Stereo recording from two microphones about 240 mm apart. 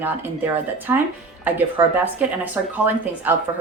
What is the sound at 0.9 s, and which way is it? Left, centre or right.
Speech, centre.